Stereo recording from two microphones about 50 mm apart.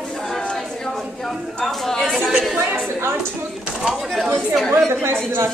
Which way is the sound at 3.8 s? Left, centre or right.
Centre.